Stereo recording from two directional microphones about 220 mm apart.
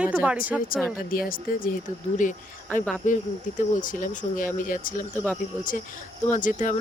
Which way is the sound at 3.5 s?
35° left (ahead or behind).